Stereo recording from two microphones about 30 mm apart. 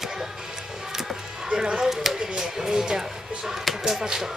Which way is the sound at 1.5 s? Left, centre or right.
Right.